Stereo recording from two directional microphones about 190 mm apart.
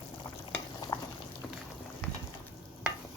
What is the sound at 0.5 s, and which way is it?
Stir, 20° left (ahead or behind).